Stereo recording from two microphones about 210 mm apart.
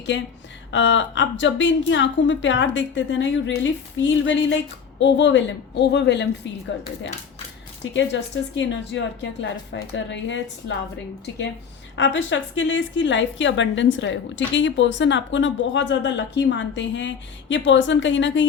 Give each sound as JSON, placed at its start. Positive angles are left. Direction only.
{"t": 0.1, "sound": "a woman's voice", "side_deg": 60}
{"t": 7.9, "sound": "a woman's voice", "side_deg": 60}
{"t": 11.9, "sound": "a woman's voice", "side_deg": 60}